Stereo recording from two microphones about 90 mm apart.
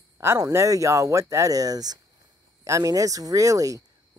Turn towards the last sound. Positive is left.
turn(degrees=-40)  # may be behind; listen again after turning